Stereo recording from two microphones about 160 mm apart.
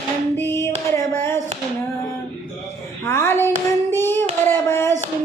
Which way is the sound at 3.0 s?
15° left (ahead or behind).